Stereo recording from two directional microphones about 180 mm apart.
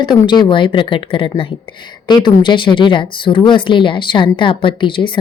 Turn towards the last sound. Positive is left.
turn(degrees=30)  # may be behind; listen again after turning